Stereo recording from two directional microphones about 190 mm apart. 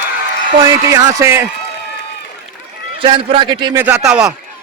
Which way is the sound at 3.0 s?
25° right (ahead or behind).